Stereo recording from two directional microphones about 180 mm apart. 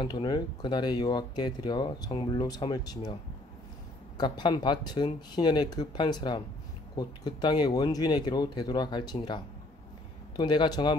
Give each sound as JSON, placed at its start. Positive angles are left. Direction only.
{"t": 0.0, "sound": "speech", "side_deg": 25}
{"t": 4.2, "sound": "speech", "side_deg": 25}